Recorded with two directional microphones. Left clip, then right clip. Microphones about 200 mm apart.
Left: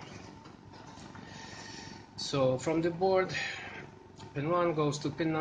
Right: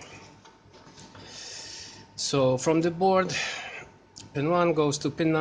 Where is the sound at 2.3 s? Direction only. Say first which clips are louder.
Right 6 dB; 55° right (ahead or behind).